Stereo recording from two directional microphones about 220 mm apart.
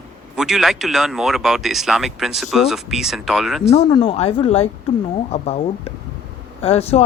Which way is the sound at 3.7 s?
25° left (ahead or behind).